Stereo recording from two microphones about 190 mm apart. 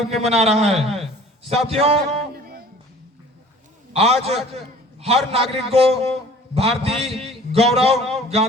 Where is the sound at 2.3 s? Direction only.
55° right (ahead or behind).